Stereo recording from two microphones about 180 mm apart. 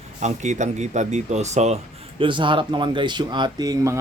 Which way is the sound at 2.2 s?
25° right (ahead or behind).